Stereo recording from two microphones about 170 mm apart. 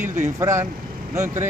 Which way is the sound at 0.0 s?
15° right (ahead or behind).